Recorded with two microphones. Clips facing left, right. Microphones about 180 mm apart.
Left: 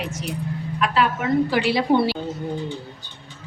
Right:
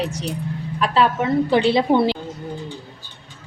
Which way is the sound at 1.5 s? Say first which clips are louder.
Right 3 dB; 25° right (ahead or behind).